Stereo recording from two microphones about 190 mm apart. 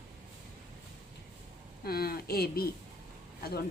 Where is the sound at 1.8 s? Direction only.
55° left (ahead or behind).